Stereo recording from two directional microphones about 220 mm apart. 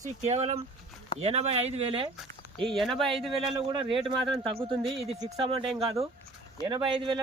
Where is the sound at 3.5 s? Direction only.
25° right (ahead or behind).